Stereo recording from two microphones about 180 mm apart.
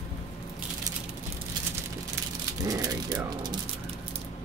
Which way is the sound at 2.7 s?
20° right (ahead or behind).